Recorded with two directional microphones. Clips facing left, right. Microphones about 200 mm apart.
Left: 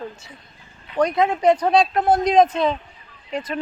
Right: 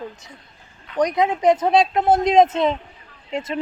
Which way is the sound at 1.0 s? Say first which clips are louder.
Even; 15° right (ahead or behind).